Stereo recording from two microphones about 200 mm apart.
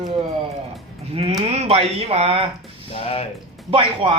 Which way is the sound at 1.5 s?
30° right (ahead or behind).